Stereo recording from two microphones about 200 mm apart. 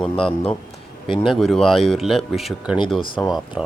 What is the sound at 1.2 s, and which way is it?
Speech, centre (ahead or behind).